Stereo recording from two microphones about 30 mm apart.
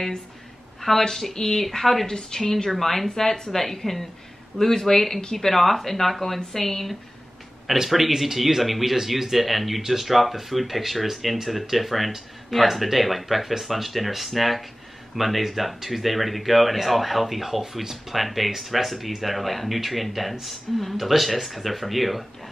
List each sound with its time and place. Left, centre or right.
0.7 s a sound: centre
1.0 s speech: centre
2.7 s speech: centre
7.6 s speech: centre